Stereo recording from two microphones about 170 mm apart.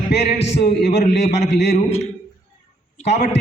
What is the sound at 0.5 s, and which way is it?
Speech, 75° left (ahead or behind).